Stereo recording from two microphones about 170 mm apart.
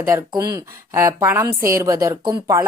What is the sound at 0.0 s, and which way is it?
A woman's voice, 20° right (ahead or behind).